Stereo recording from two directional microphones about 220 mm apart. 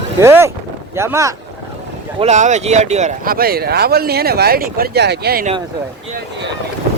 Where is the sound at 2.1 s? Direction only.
30° right (ahead or behind).